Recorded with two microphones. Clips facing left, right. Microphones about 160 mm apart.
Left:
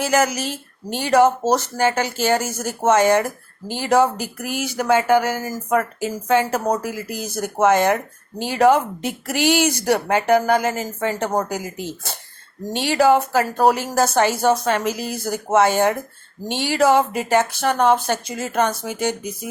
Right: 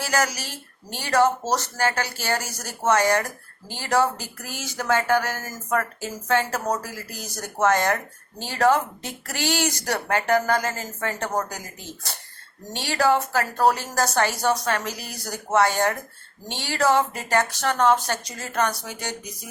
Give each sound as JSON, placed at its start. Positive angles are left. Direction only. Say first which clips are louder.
{"t": 0.0, "sound": "speech", "louder": "left 6 dB", "side_deg": 20}